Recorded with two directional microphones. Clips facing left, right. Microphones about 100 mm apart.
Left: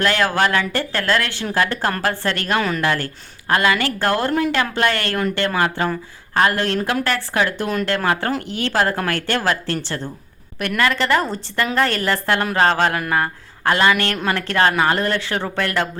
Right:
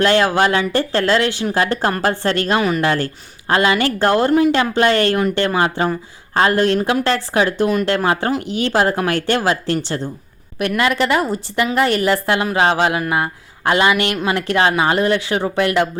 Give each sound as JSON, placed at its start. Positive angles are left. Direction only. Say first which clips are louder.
{"t": 0.0, "sound": "speech", "louder": "right 4 dB", "side_deg": -25}
{"t": 2.8, "sound": "a woman's voice", "louder": "right 3 dB", "side_deg": -25}